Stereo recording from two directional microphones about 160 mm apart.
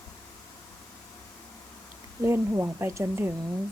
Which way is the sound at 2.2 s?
15° right (ahead or behind).